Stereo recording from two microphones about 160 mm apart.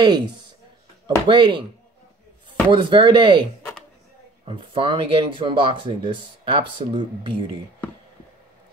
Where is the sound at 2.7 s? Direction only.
30° right (ahead or behind).